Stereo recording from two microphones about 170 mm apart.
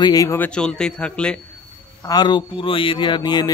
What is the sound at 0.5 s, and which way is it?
Speech, 5° left (ahead or behind).